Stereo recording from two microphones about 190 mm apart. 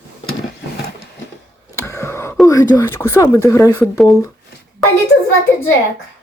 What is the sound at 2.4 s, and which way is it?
Speech, 15° left (ahead or behind).